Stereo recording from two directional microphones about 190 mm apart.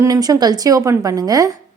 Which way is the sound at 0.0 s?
20° right (ahead or behind).